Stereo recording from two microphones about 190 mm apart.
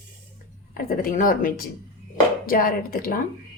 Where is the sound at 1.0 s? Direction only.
45° left (ahead or behind).